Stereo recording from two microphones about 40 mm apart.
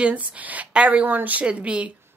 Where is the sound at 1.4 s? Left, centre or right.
Right.